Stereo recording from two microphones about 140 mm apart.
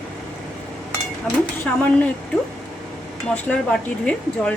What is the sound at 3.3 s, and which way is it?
Speech, 10° left (ahead or behind).